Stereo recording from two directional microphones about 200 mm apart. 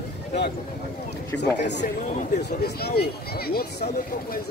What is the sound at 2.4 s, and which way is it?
Speech, 55° left (ahead or behind).